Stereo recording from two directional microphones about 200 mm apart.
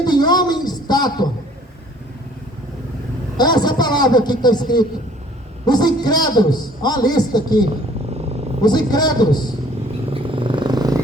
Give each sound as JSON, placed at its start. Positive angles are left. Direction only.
{"t": 0.0, "sound": "a sound", "side_deg": 20}
{"t": 3.3, "sound": "a man's voice", "side_deg": 20}
{"t": 8.6, "sound": "a man's voice", "side_deg": 20}
{"t": 10.1, "sound": "purr", "side_deg": -25}